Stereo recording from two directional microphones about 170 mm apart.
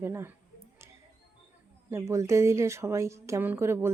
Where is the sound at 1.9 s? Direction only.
15° right (ahead or behind).